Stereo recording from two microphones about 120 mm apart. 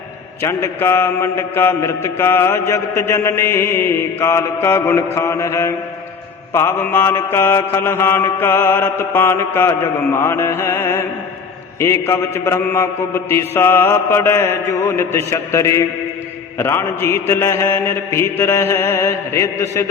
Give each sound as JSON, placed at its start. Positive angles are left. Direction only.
{"t": 0.4, "sound": "mantra", "side_deg": 25}